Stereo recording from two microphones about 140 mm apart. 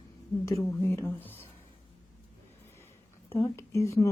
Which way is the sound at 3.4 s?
20° left (ahead or behind).